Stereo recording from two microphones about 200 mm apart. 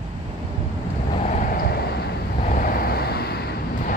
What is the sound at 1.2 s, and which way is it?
Vehicle, 40° left (ahead or behind).